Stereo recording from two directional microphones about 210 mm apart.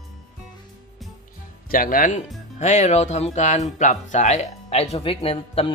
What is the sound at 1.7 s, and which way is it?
Speech, 40° left (ahead or behind).